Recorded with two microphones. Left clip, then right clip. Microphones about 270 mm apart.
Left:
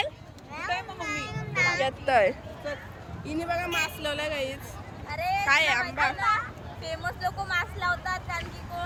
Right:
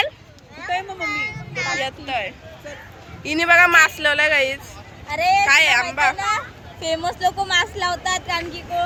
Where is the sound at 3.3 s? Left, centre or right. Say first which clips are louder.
Right 16 dB; centre.